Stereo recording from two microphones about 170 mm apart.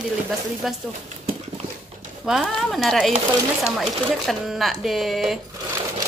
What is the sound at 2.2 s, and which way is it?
A child's voice, 5° right (ahead or behind).